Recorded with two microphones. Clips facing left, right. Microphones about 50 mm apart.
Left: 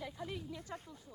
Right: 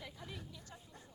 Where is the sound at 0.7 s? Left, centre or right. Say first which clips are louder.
Left 10 dB; left.